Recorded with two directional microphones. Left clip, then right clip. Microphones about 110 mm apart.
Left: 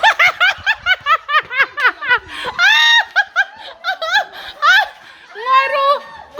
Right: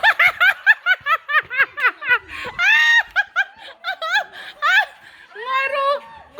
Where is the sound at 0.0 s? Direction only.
35° left (ahead or behind); by 0.9 s 20° left (ahead or behind).